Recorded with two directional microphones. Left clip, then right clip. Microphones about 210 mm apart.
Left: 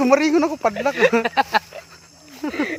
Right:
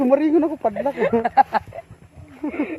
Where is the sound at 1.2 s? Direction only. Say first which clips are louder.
Right 2 dB; 20° right (ahead or behind).